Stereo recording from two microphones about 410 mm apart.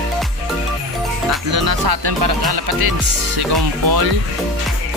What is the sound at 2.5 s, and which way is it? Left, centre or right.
Speech, right.